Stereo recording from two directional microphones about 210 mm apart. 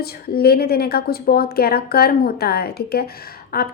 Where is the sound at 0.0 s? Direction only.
45° left (ahead or behind).